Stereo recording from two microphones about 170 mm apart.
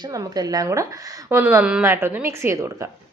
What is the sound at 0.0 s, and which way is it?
A woman's voice, 20° right (ahead or behind).